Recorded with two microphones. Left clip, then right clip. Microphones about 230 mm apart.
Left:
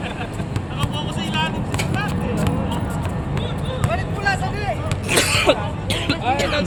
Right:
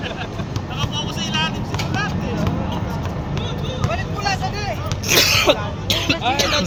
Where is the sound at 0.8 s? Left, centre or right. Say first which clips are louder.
Right 2 dB; right.